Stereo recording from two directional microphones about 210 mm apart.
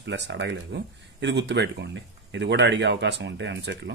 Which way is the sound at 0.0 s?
55° right (ahead or behind).